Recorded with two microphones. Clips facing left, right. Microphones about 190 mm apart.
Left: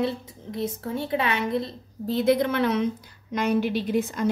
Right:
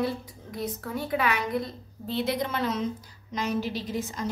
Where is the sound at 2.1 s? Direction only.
50° left (ahead or behind).